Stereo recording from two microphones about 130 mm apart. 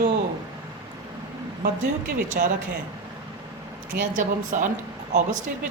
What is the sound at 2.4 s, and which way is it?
Speech, 90° right.